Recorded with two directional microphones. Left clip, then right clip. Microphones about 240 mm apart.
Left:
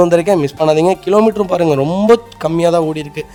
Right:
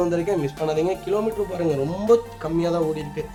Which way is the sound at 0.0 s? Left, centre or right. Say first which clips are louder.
Left 12 dB; left.